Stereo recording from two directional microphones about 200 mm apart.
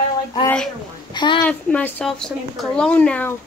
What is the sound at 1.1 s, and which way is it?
Speech, 25° left (ahead or behind).